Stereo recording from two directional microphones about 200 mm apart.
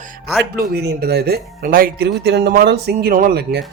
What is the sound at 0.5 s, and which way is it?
Speech, 50° right (ahead or behind).